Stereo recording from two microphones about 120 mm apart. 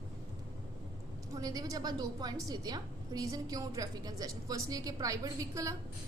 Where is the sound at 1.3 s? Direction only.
30° right (ahead or behind).